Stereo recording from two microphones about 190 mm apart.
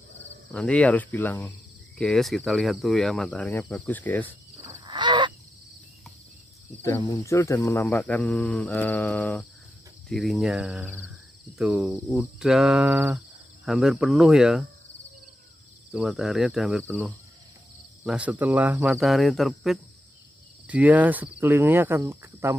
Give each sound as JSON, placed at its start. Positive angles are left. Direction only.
{"t": 0.5, "sound": "speech", "side_deg": 5}
{"t": 2.0, "sound": "cricket", "side_deg": 0}
{"t": 4.6, "sound": "cricket", "side_deg": -20}
{"t": 7.0, "sound": "speech", "side_deg": 15}
{"t": 13.7, "sound": "cricket", "side_deg": 0}
{"t": 15.9, "sound": "cricket", "side_deg": 0}
{"t": 20.6, "sound": "speech", "side_deg": -10}